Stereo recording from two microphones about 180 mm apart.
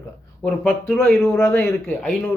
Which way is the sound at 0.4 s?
5° left (ahead or behind).